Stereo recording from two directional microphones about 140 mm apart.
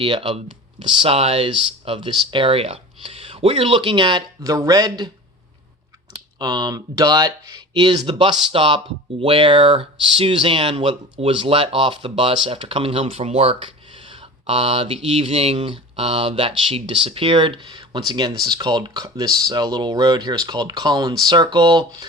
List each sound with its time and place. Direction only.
0.0 s speech: 40° right (ahead or behind)
6.4 s speech: 30° right (ahead or behind)